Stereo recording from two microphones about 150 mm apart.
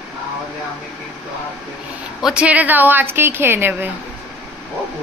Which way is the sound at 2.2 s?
5° right (ahead or behind).